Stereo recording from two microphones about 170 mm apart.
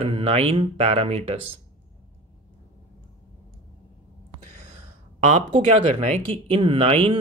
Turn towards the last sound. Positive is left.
turn(degrees=-35)  # may be behind; listen again after turning